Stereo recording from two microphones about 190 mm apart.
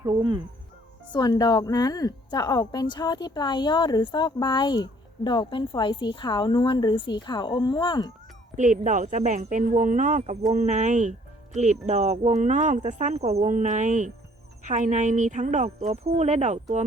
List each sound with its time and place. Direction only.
0.0 s speech: 25° right (ahead or behind)
1.1 s a woman's voice: 20° left (ahead or behind)
8.5 s speech: 40° right (ahead or behind)